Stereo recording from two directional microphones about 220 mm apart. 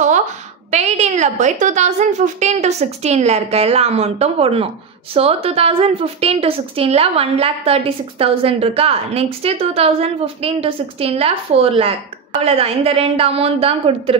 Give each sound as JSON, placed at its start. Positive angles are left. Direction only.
{"t": 0.7, "sound": "a woman's voice", "side_deg": -30}